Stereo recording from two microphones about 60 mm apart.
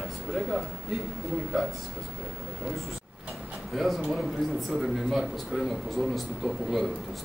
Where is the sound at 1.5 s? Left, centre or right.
Centre.